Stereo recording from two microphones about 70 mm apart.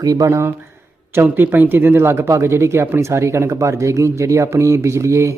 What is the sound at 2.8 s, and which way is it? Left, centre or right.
Speech, right.